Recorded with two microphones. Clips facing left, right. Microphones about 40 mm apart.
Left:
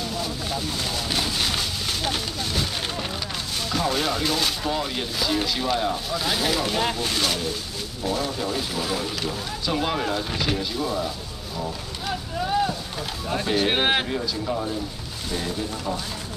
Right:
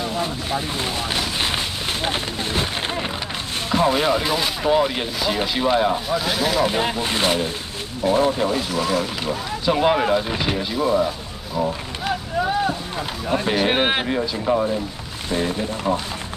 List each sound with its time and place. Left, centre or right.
0.0 s speech: right
1.4 s a sound: right
3.7 s speech: right
6.1 s speech: centre
6.6 s speech: centre
8.7 s speech: centre; by 12.1 s right
12.4 s speech: centre
14.0 s speech: right